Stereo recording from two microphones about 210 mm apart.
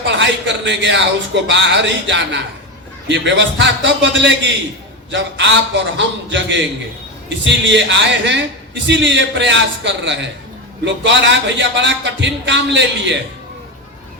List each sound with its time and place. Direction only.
0.0 s a man's voice: 60° right (ahead or behind)